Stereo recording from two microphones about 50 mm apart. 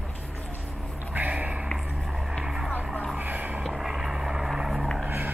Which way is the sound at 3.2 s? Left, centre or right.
Right.